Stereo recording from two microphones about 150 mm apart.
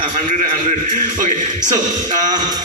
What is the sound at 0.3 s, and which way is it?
A man's voice, 60° right (ahead or behind).